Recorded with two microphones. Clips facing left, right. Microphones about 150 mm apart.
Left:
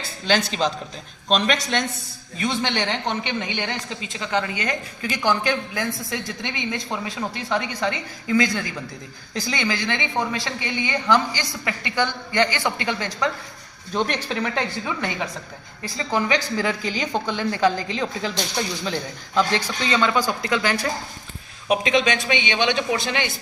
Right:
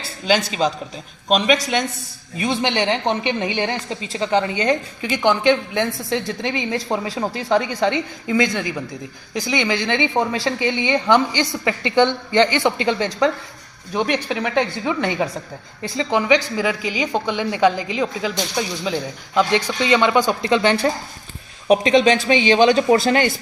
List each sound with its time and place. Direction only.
0.3 s a man's voice: 5° right (ahead or behind); by 13.3 s 25° right (ahead or behind)
13.9 s speech: 15° right (ahead or behind); by 23.3 s 45° right (ahead or behind)